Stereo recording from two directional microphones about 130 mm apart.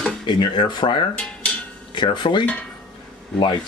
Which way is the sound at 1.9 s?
35° left (ahead or behind).